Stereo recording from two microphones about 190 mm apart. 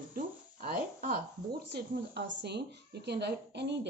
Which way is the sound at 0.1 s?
50° right (ahead or behind).